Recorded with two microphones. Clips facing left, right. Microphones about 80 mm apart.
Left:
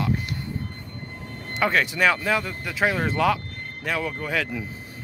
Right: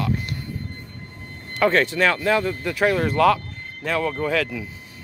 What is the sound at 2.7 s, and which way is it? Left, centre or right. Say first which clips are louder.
Speech: right 2 dB; centre.